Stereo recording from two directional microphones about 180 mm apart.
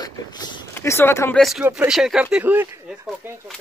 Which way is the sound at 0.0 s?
25° left (ahead or behind).